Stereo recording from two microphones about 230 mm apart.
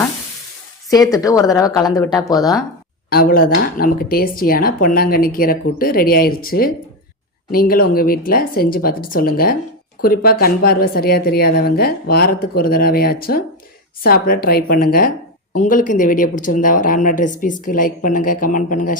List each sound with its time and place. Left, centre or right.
1.1 s speech: centre
3.1 s speech: left